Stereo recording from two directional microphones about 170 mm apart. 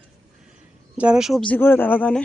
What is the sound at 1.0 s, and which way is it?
Speech, 5° right (ahead or behind).